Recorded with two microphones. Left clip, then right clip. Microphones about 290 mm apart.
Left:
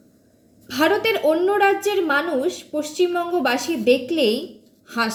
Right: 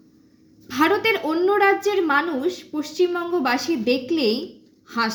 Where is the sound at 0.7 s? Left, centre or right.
Centre.